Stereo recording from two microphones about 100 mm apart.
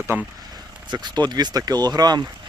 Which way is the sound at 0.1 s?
20° right (ahead or behind).